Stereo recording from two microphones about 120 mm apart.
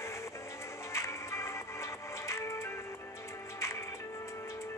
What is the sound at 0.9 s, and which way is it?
Music, 25° left (ahead or behind).